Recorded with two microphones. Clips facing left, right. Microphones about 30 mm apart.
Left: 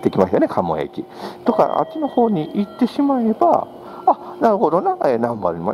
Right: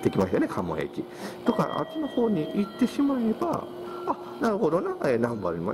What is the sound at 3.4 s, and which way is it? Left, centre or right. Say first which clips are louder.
Speech: left 14 dB; left.